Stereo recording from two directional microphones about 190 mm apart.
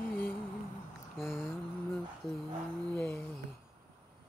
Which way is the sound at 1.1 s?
Centre (ahead or behind).